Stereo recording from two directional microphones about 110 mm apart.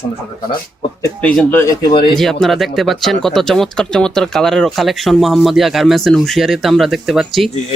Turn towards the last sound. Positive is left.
turn(degrees=0)  # may be behind; listen again after turning